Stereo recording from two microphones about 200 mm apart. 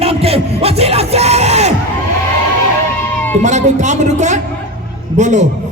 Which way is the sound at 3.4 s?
35° right (ahead or behind).